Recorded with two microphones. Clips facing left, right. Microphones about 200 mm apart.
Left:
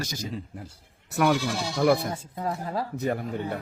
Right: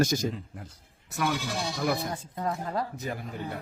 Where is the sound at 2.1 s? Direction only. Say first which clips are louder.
Left 1 dB; 5° left (ahead or behind).